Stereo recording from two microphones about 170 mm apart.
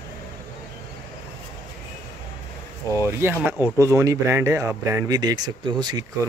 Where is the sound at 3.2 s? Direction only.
10° right (ahead or behind).